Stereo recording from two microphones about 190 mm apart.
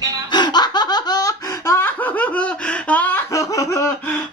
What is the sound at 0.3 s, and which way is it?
Laughter, 20° left (ahead or behind).